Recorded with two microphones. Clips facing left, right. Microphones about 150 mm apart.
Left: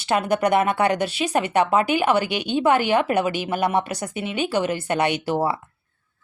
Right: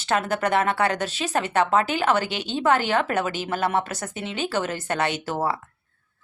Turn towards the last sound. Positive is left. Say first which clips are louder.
# left 4 dB
turn(degrees=10)  # may be behind; listen again after turning